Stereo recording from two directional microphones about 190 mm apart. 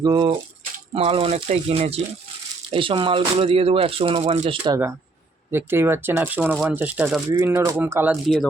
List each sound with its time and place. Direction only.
0.0 s speech: 25° right (ahead or behind)
5.5 s speech: 10° right (ahead or behind)